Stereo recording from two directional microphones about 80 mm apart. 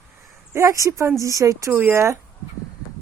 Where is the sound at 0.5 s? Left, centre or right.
Right.